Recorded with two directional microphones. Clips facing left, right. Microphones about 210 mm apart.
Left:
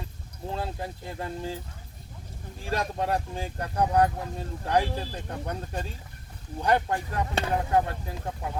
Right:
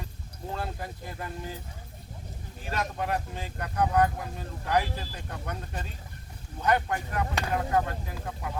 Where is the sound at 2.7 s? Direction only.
30° left (ahead or behind).